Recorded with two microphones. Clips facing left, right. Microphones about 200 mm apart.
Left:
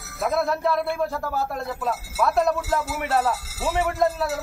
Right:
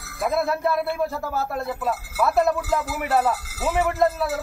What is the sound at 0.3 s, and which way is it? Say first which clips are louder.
A man's voice: even; centre (ahead or behind).